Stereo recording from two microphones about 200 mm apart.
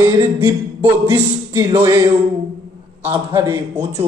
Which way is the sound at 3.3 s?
15° right (ahead or behind).